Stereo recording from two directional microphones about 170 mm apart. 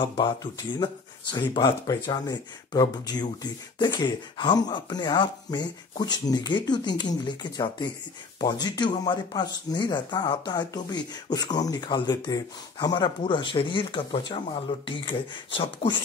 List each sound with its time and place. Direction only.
1.5 s speech: 25° left (ahead or behind)